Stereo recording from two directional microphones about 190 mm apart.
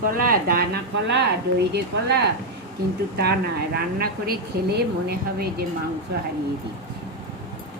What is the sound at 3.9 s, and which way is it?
Speech, 55° right (ahead or behind).